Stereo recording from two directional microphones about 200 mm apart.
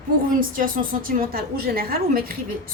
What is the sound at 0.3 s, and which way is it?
A woman's voice, 45° right (ahead or behind).